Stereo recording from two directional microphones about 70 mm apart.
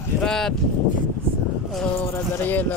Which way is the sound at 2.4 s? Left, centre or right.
Left.